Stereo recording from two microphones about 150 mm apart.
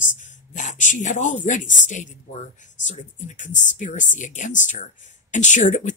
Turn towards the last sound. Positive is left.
turn(degrees=55)  # may be behind; listen again after turning